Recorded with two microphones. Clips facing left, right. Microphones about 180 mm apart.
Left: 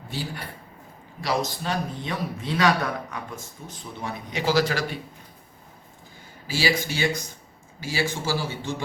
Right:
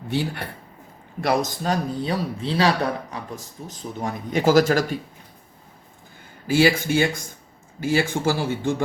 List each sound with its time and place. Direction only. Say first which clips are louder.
0.1 s speech: right 8 dB; 65° right (ahead or behind)
1.2 s a man's voice: right 4 dB; 50° right (ahead or behind)
6.5 s a man's voice: right 7 dB; 55° right (ahead or behind)